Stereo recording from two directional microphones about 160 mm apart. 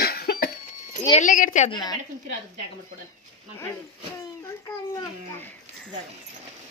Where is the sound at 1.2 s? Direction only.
55° left (ahead or behind).